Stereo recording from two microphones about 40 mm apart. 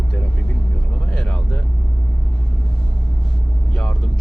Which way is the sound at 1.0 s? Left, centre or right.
Centre.